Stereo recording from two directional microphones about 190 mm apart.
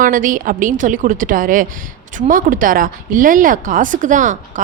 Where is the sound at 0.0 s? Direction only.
45° right (ahead or behind).